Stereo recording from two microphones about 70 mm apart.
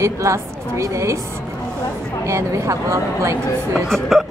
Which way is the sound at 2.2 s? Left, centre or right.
Right.